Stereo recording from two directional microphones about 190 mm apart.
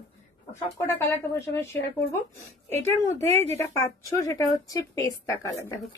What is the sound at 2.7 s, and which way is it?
A woman's voice, 15° left (ahead or behind).